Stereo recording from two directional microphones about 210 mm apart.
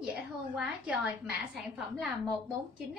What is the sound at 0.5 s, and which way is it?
A child's voice, 5° right (ahead or behind).